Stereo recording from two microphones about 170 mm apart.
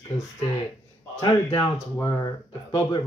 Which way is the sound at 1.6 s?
20° left (ahead or behind).